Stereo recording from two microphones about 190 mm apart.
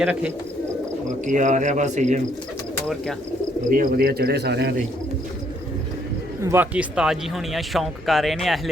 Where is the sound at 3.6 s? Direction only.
45° right (ahead or behind).